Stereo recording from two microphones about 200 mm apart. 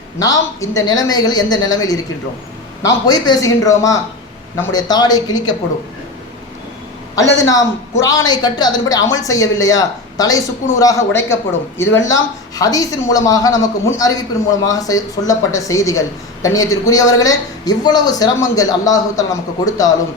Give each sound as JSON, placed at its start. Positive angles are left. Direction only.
{"t": 0.2, "sound": "a man's voice", "side_deg": 15}
{"t": 7.4, "sound": "speech", "side_deg": 15}